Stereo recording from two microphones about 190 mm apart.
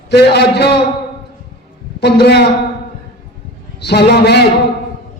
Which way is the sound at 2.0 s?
60° left (ahead or behind).